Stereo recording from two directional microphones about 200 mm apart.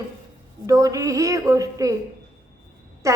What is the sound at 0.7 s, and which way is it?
A woman's voice, 15° right (ahead or behind).